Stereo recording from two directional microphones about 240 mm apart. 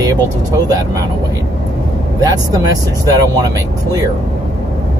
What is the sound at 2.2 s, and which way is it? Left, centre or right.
Speech, centre.